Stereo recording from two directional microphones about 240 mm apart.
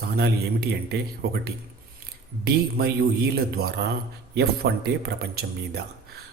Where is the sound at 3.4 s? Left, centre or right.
Right.